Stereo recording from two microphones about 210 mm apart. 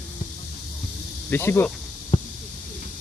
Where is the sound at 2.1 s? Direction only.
30° left (ahead or behind).